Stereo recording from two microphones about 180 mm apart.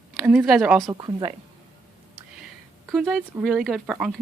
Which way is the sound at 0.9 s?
25° right (ahead or behind).